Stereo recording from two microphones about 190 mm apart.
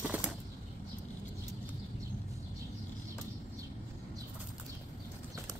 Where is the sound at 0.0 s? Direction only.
10° right (ahead or behind).